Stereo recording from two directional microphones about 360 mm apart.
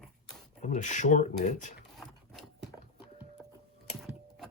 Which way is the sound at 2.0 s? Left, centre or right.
Centre.